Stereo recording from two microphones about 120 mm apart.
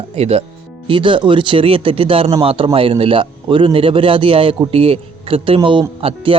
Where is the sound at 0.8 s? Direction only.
45° right (ahead or behind).